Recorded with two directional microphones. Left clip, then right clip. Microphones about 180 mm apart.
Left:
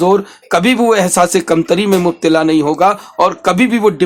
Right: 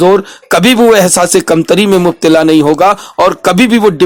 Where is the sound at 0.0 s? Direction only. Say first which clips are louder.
Right 4 dB; 35° right (ahead or behind).